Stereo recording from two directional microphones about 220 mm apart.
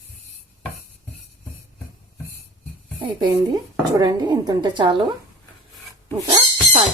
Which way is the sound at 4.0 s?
20° right (ahead or behind).